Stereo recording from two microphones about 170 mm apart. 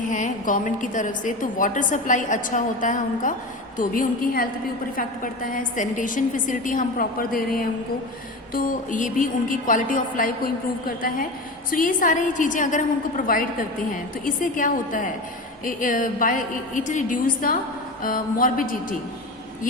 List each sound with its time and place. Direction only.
0.1 s a woman's voice: 50° left (ahead or behind)